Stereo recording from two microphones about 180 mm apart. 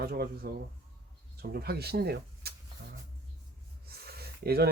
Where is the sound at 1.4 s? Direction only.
60° right (ahead or behind).